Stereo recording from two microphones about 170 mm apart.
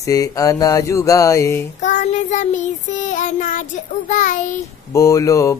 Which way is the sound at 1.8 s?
45° left (ahead or behind).